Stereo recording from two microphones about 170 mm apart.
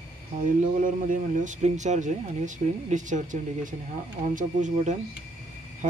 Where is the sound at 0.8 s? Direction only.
50° right (ahead or behind).